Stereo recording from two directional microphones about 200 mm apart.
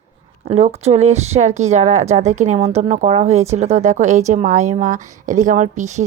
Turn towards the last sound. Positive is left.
turn(degrees=-35)  # may be behind; listen again after turning